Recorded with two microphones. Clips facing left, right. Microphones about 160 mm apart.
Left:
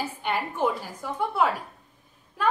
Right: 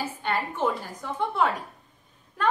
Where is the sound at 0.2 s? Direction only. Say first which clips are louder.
Left 1 dB; 10° left (ahead or behind).